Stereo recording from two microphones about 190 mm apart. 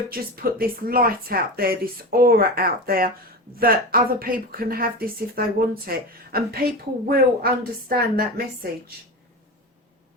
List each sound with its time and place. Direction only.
0.1 s a woman's voice: 50° right (ahead or behind)